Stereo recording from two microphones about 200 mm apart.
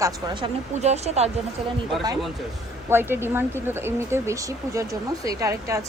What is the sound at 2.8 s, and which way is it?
A woman's voice, 10° right (ahead or behind).